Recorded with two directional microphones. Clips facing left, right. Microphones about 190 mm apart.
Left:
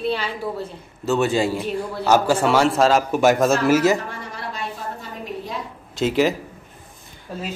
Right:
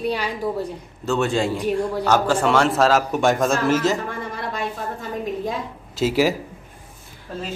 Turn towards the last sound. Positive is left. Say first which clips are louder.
# right 1 dB
turn(degrees=10)  # may be behind; listen again after turning